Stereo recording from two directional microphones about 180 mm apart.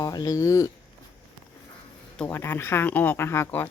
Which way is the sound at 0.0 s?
20° left (ahead or behind).